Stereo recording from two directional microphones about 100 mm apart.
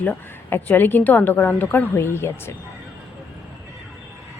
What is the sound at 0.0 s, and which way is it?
A woman's voice, 20° left (ahead or behind).